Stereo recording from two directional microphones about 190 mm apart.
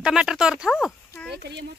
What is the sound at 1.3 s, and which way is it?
Speech, 60° right (ahead or behind).